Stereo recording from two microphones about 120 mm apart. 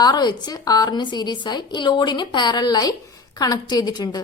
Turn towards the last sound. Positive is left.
turn(degrees=35)  # may be behind; listen again after turning